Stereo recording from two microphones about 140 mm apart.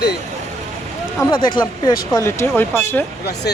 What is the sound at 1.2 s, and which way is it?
Speech, 30° left (ahead or behind).